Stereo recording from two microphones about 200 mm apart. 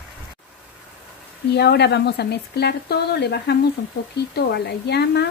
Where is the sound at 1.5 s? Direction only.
55° left (ahead or behind).